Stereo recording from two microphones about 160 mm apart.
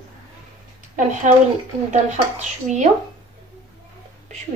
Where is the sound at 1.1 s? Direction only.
50° right (ahead or behind).